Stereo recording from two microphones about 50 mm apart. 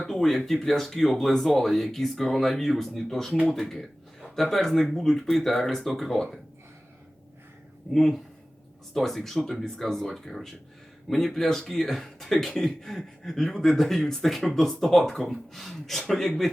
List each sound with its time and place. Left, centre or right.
0.1 s a man's voice: centre
7.9 s a man's voice: centre